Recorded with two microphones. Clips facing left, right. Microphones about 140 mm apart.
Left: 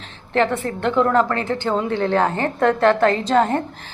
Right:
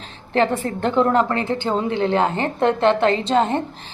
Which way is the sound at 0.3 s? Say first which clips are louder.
Even; 30° right (ahead or behind).